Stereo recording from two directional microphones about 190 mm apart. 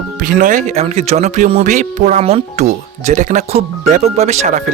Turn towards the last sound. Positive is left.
turn(degrees=-35)  # may be behind; listen again after turning